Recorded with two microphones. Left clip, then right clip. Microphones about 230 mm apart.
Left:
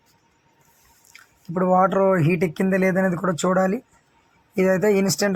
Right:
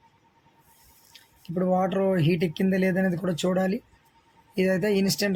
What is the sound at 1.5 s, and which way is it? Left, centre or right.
Speech, centre.